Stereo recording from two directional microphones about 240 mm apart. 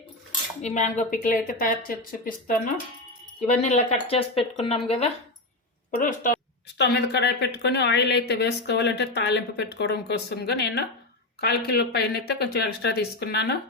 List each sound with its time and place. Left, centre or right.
0.6 s a woman's voice: left
6.0 s speech: left
6.7 s a woman's voice: left